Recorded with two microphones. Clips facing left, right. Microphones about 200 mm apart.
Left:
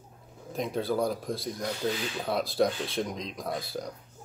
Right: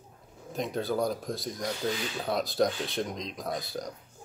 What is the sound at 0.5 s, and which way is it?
Speech, centre (ahead or behind).